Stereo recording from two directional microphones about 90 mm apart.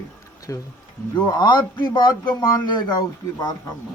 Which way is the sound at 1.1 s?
55° left (ahead or behind).